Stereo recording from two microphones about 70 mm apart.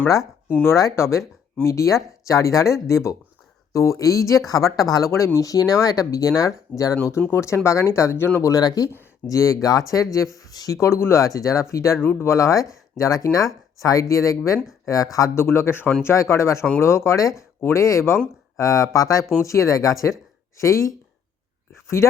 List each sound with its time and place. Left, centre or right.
0.8 s speech: left
5.4 s speech: left
7.2 s speech: left
8.6 s speech: left
9.2 s speech: left
10.8 s speech: left
15.4 s speech: left
17.6 s speech: left
18.5 s speech: left
22.0 s speech: left